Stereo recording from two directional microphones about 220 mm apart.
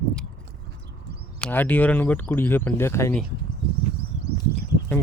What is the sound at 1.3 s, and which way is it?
Speech, 5° left (ahead or behind).